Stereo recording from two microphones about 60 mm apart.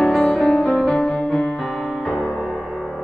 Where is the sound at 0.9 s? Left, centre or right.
Centre.